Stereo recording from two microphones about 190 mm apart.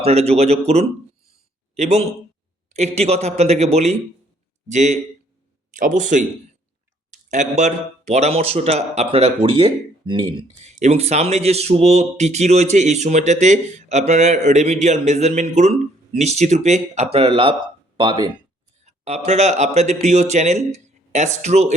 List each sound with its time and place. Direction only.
0.0 s speech: 35° right (ahead or behind)
1.7 s a man's voice: 35° right (ahead or behind)
18.9 s speech: 35° right (ahead or behind)